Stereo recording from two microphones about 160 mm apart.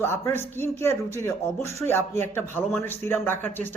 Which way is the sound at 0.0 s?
15° left (ahead or behind).